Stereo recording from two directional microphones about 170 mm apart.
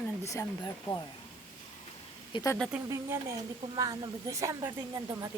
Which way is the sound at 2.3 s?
20° left (ahead or behind).